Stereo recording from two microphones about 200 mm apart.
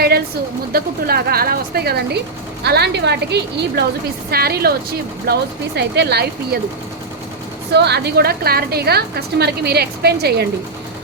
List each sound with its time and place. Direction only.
0.7 s a woman's voice: 50° right (ahead or behind)
7.7 s a woman's voice: 55° right (ahead or behind)